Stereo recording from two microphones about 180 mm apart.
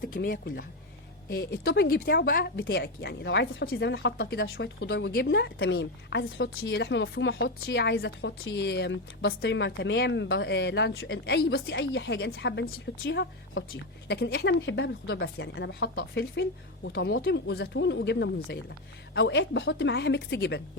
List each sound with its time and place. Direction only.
0.0 s a woman's voice: 50° left (ahead or behind); by 20.6 s 70° left (ahead or behind)